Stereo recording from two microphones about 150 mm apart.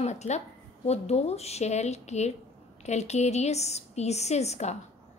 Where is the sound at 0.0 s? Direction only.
50° left (ahead or behind).